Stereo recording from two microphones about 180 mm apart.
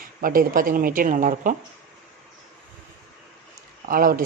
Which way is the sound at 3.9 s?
50° right (ahead or behind).